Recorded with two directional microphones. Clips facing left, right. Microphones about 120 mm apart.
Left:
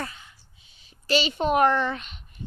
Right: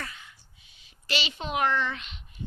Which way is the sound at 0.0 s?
30° left (ahead or behind).